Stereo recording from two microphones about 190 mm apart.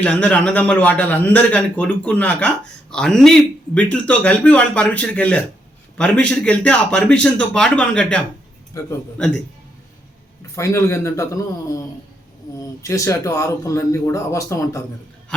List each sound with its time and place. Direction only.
0.0 s a man's voice: 5° left (ahead or behind)
8.7 s a man's voice: 15° left (ahead or behind)
10.5 s a man's voice: 15° left (ahead or behind)
12.8 s a man's voice: 15° left (ahead or behind)